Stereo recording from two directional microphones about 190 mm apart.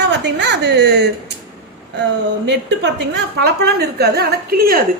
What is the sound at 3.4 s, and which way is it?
A woman's voice, 60° right (ahead or behind).